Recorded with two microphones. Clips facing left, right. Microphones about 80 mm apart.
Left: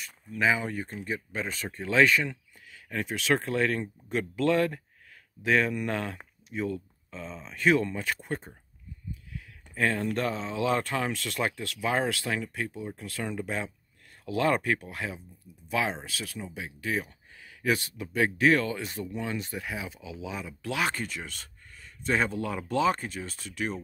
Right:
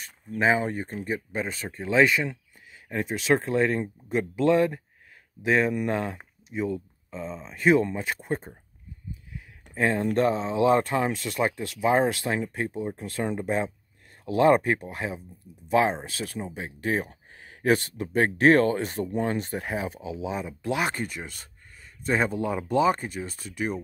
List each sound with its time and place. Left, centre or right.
0.0 s speech: right
1.1 s speech: centre